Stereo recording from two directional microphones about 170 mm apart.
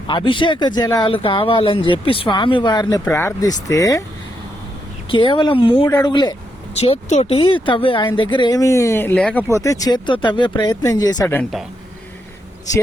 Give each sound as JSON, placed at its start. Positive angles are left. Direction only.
{"t": 0.1, "sound": "speech", "side_deg": 30}
{"t": 3.0, "sound": "speech", "side_deg": 15}
{"t": 5.0, "sound": "speech", "side_deg": 30}
{"t": 6.7, "sound": "speech", "side_deg": 40}
{"t": 9.5, "sound": "speech", "side_deg": 20}